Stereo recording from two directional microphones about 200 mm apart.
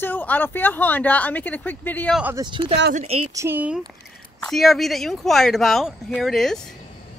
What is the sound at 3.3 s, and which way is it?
Speech, 15° right (ahead or behind).